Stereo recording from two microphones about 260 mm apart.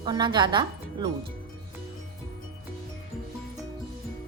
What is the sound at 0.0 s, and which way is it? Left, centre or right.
A woman's voice, centre.